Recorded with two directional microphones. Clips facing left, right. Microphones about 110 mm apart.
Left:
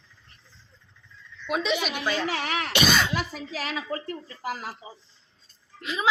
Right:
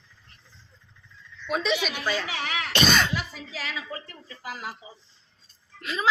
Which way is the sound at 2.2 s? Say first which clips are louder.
Left 3 dB; 40° left (ahead or behind).